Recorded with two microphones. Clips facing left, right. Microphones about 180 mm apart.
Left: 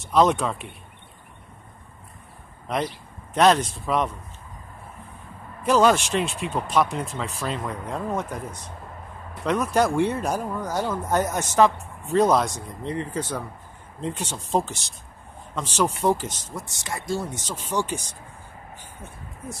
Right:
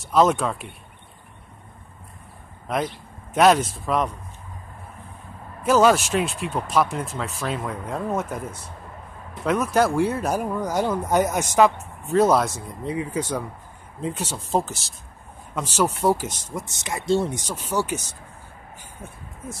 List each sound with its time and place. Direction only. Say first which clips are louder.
0.0 s speech: right 1 dB; centre (ahead or behind)
2.7 s speech: right 1 dB; centre (ahead or behind)
5.6 s speech: right 1 dB; 5° right (ahead or behind); by 17.4 s 25° right (ahead or behind)
17.4 s speech: right 1 dB; 10° right (ahead or behind)